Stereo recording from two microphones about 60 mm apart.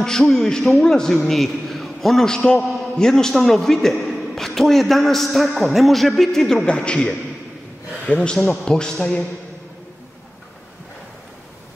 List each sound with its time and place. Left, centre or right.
0.0 s a man's voice: centre
6.6 s a man's voice: centre